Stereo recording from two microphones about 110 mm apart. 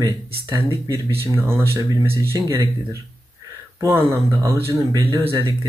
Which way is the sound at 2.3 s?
35° right (ahead or behind).